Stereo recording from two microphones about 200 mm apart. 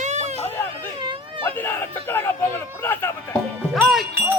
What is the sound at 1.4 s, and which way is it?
A man's voice, 10° left (ahead or behind).